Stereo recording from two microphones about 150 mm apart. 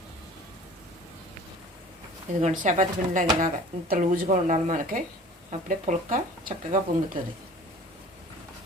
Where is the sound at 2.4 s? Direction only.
55° right (ahead or behind).